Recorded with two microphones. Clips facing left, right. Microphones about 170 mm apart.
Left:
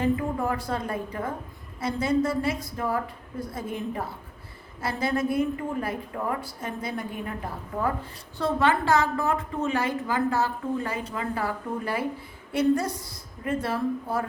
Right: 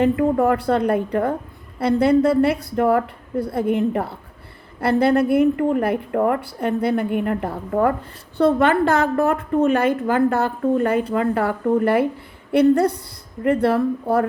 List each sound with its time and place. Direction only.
0.0 s a woman's voice: 65° right (ahead or behind)